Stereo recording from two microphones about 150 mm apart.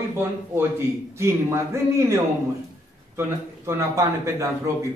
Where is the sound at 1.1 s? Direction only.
20° right (ahead or behind).